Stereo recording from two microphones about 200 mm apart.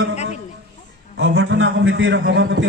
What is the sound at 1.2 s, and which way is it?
A man's voice, 60° right (ahead or behind).